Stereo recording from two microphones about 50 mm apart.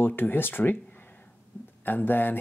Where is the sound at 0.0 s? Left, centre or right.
Left.